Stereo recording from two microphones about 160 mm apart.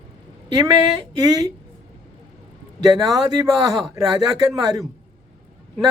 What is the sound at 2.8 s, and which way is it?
Speech, 25° right (ahead or behind).